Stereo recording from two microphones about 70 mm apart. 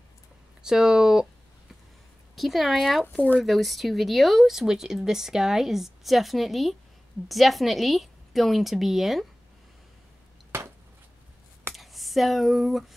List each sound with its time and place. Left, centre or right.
0.6 s speech: centre
2.3 s speech: centre
3.2 s speech: left
3.4 s speech: centre
11.7 s speech: centre